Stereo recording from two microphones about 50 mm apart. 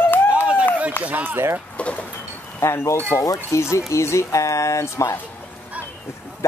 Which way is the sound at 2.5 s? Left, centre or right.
Left.